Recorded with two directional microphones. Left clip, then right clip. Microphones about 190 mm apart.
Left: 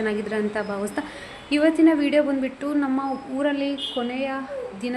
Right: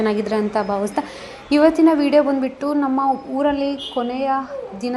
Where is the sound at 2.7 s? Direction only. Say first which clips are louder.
Right 5 dB; 5° left (ahead or behind).